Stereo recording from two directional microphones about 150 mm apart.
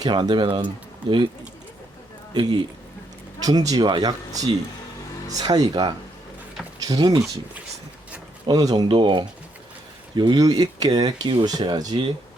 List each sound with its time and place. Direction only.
0.0 s speech: 30° right (ahead or behind)
2.3 s speech: 30° right (ahead or behind)
8.4 s speech: 25° right (ahead or behind)